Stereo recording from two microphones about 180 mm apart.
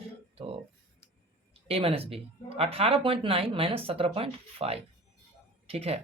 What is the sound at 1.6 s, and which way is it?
Speech, 35° right (ahead or behind).